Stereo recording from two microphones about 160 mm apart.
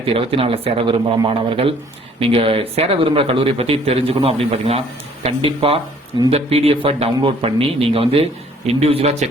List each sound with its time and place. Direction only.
0.0 s speech: 35° right (ahead or behind)